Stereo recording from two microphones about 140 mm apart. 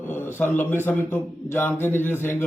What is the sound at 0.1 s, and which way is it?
A man's voice, 15° left (ahead or behind).